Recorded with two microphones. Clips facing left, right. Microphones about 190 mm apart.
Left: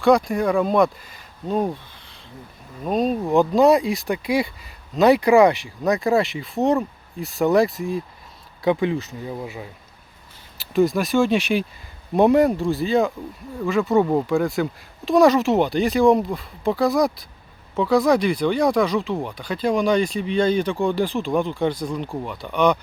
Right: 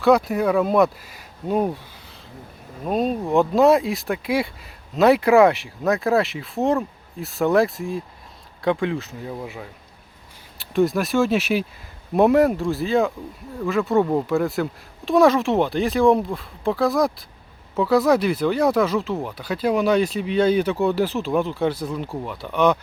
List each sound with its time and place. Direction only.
0.0 s speech: 5° right (ahead or behind)